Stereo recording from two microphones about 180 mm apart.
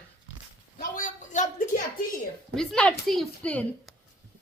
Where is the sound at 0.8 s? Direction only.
50° left (ahead or behind).